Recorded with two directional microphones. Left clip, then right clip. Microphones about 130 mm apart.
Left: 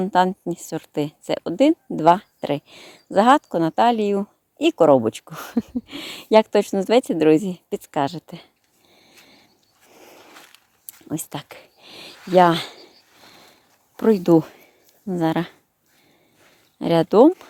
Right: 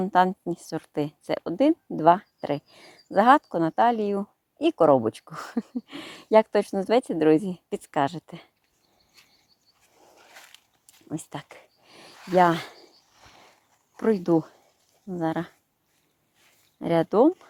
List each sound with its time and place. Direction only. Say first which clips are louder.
0.0 s a woman's voice: left 3 dB; 20° left (ahead or behind)
10.8 s a sound: left 6 dB; 35° left (ahead or behind)
12.3 s speech: left 5 dB; 35° left (ahead or behind)
13.9 s speech: left 6 dB; 40° left (ahead or behind)
15.0 s speech: left 6 dB; 65° left (ahead or behind)
16.7 s speech: left 6 dB; 40° left (ahead or behind)